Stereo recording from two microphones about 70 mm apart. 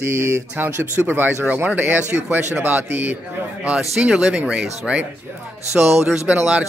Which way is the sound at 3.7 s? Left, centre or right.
Centre.